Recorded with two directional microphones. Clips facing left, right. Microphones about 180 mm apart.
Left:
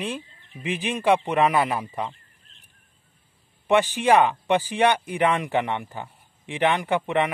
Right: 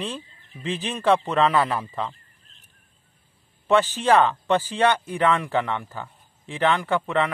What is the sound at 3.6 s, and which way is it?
Speech, 15° left (ahead or behind).